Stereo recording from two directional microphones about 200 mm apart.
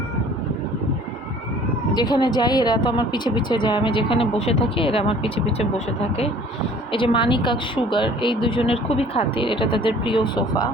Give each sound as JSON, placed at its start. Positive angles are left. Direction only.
{"t": 2.0, "sound": "a woman's voice", "side_deg": 20}